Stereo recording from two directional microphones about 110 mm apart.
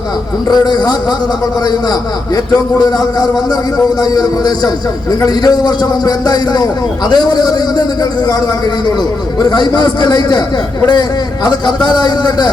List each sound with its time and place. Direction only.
0.4 s a man's voice: 40° left (ahead or behind)
9.4 s a man's voice: 40° left (ahead or behind)
11.4 s a man's voice: 40° left (ahead or behind)